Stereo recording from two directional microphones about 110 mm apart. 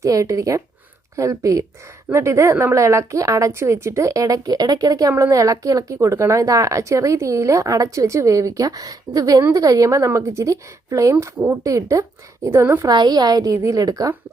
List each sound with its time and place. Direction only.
0.0 s a woman's voice: 30° right (ahead or behind)
12.9 s a woman's voice: 40° right (ahead or behind)